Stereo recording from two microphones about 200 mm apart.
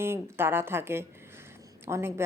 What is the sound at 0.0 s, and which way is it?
A woman's voice, 10° right (ahead or behind).